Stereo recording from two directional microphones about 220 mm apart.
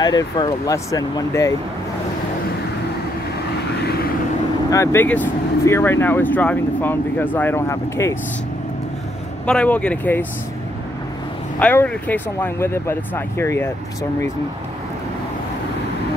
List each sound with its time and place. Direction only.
0.0 s speech: 20° left (ahead or behind)
3.8 s vehicle: 45° left (ahead or behind)
4.6 s speech: 10° left (ahead or behind)
9.5 s speech: 5° left (ahead or behind)
11.6 s speech: 10° left (ahead or behind)